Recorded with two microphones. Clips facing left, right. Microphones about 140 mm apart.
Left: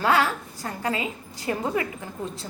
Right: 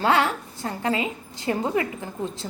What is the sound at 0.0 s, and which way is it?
A woman's voice, 25° right (ahead or behind).